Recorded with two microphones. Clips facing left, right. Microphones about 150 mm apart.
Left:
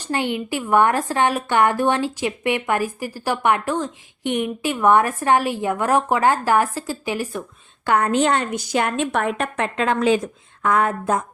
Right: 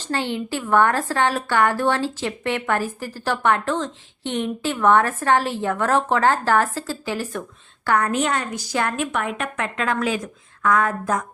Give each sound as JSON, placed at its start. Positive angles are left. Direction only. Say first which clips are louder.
{"t": 0.0, "sound": "a woman's voice", "louder": "left 2 dB", "side_deg": 15}
{"t": 9.1, "sound": "a woman's voice", "louder": "left 3 dB", "side_deg": 35}